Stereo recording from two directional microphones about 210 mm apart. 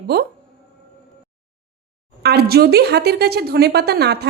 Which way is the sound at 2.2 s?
50° right (ahead or behind).